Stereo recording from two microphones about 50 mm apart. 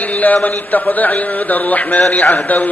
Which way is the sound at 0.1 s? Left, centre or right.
Left.